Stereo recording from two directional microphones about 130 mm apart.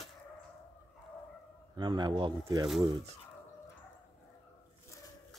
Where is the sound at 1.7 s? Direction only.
35° right (ahead or behind).